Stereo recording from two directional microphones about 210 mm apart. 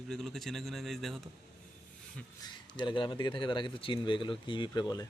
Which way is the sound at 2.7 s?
20° left (ahead or behind).